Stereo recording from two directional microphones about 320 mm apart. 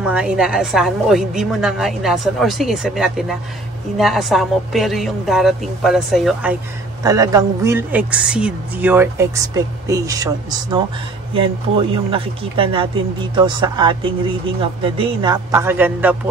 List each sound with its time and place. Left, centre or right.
0.0 s a woman's voice: centre
7.0 s speech: centre